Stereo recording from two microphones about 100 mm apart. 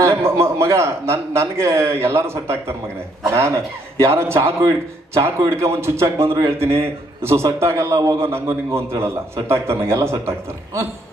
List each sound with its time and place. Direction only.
0.0 s a man's voice: 30° right (ahead or behind)